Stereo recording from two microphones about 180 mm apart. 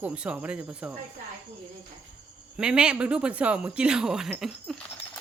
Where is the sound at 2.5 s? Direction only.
5° right (ahead or behind).